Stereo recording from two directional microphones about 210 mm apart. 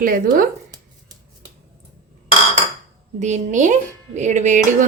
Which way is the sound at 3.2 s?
35° right (ahead or behind).